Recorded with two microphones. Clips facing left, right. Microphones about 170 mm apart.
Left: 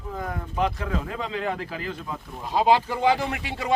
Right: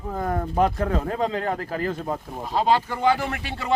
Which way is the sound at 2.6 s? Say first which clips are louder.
Left 1 dB; 10° left (ahead or behind).